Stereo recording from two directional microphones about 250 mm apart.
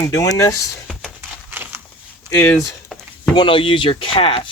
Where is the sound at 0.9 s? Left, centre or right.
Centre.